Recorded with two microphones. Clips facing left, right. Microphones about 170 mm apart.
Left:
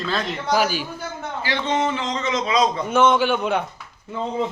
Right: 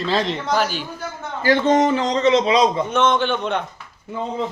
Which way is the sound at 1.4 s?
45° right (ahead or behind).